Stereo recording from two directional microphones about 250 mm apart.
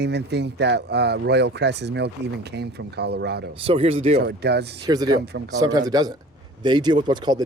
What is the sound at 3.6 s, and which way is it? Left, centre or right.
Speech, right.